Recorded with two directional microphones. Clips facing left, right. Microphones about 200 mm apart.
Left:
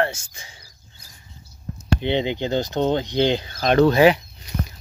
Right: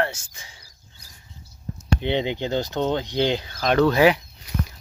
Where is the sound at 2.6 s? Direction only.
20° left (ahead or behind).